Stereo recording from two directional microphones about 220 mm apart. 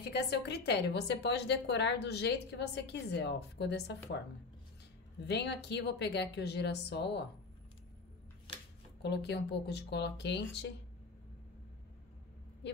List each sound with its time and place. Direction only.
0.1 s a woman's voice: 50° left (ahead or behind)
5.2 s a woman's voice: 50° left (ahead or behind)
9.0 s a woman's voice: 50° left (ahead or behind)